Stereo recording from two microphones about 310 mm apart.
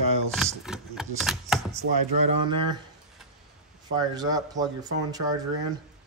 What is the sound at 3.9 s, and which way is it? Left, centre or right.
Speech, centre.